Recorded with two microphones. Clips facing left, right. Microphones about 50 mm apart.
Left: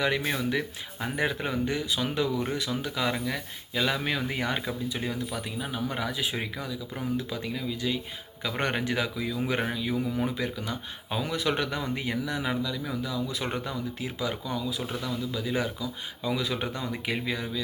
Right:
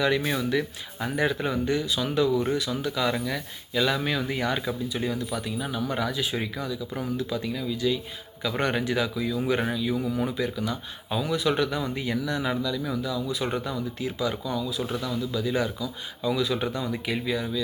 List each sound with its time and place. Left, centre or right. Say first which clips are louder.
0.9 s speech: right 3 dB; left
7.4 s speech: right 4 dB; left
13.0 s speech: right 3 dB; left